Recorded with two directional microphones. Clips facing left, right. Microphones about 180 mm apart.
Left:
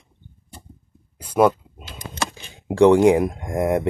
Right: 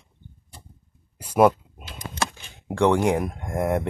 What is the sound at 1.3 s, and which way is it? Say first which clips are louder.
Drawer open or close: left 1 dB; 5° right (ahead or behind).